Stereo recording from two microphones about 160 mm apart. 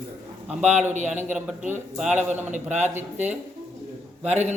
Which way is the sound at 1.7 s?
5° right (ahead or behind).